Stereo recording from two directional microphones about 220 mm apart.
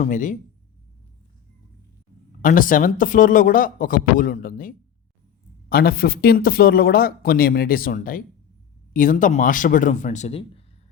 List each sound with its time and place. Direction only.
0.0 s speech: 35° left (ahead or behind)
2.4 s a man's voice: 40° left (ahead or behind)